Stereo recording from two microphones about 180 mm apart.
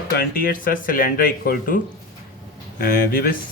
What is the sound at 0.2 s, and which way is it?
Speech, 55° left (ahead or behind).